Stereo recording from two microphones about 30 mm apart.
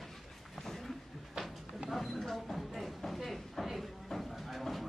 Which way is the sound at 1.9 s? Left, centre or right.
Centre.